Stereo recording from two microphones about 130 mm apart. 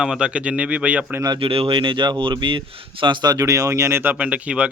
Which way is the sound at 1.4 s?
45° right (ahead or behind).